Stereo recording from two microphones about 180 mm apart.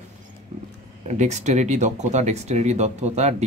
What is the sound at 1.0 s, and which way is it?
Speech, 40° right (ahead or behind).